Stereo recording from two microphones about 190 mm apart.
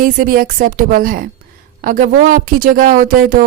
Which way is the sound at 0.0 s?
45° right (ahead or behind).